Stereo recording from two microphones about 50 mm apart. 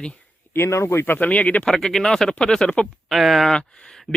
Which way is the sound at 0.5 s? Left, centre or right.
Left.